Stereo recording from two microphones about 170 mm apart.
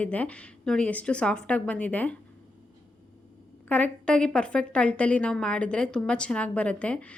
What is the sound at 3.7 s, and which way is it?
A woman's voice, 5° left (ahead or behind).